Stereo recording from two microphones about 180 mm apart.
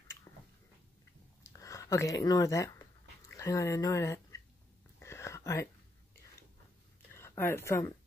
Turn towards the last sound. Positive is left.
turn(degrees=15)  # may be behind; listen again after turning